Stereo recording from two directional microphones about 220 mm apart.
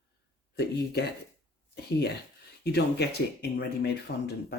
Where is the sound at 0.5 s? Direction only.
45° left (ahead or behind).